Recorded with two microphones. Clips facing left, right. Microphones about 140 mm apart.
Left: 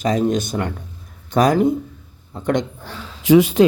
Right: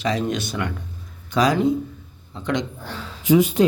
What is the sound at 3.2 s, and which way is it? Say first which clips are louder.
Speech: left 4 dB; 90° left.